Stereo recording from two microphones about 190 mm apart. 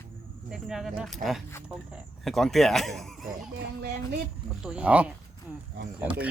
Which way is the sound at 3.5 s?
55° right (ahead or behind).